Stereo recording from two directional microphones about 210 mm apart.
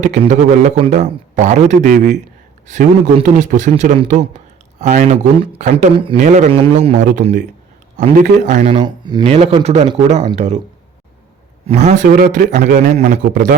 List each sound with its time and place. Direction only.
0.0 s speech: 35° right (ahead or behind)
11.6 s speech: 30° right (ahead or behind)